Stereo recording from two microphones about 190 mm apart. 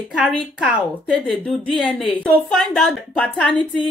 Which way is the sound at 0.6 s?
5° right (ahead or behind).